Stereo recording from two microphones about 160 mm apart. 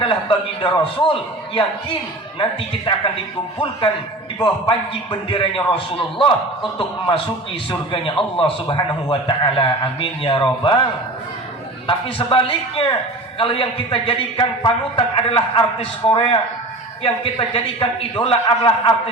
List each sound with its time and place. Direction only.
0.0 s a man's voice: 30° left (ahead or behind)
2.4 s a man's voice: 30° left (ahead or behind)
4.4 s a man's voice: 25° left (ahead or behind)
11.9 s a man's voice: 35° left (ahead or behind)
17.5 s a man's voice: 35° left (ahead or behind)